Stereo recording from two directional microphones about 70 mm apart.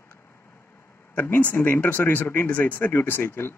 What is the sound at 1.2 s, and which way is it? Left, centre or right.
Speech, left.